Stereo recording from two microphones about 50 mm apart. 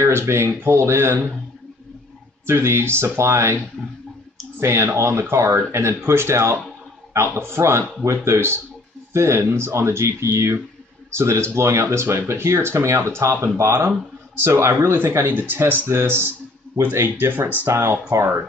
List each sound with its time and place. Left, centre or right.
0.0 s speech: right
2.4 s speech: right
4.6 s speech: right
11.1 s speech: right
17.6 s speech: right